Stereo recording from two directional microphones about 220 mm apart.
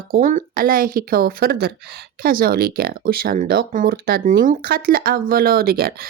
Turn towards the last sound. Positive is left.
turn(degrees=-45)  # may be behind; listen again after turning